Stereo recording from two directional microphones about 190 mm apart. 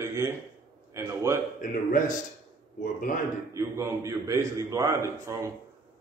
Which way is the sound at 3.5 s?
15° right (ahead or behind).